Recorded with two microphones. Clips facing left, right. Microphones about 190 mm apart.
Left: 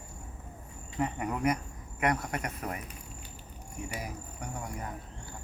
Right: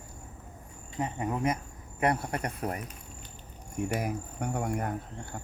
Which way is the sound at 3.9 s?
55° right (ahead or behind).